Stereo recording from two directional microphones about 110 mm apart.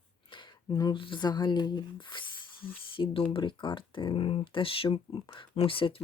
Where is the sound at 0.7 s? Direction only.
35° left (ahead or behind).